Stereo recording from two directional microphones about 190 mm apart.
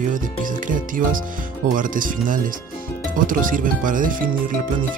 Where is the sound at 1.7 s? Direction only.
45° right (ahead or behind).